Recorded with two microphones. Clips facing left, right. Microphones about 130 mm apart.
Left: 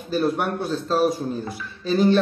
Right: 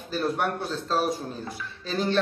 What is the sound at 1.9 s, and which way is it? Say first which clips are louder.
Speech: left 9 dB; 10° left (ahead or behind).